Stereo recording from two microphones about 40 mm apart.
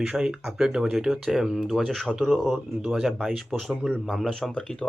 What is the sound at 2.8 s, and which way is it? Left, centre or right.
Speech, centre.